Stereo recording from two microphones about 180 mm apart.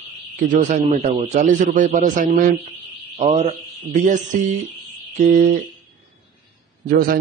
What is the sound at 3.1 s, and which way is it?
Speech, 35° right (ahead or behind).